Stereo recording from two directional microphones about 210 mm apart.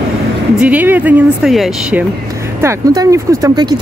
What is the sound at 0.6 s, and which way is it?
Speech, 10° right (ahead or behind).